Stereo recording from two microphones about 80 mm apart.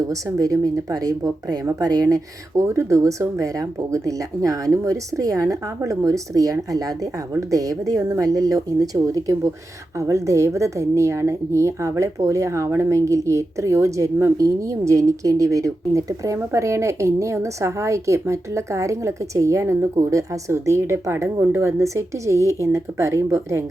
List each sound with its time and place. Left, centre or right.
0.1 s a woman's voice: right